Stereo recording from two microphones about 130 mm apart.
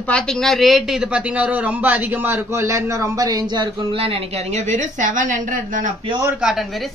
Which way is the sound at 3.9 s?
50° right (ahead or behind).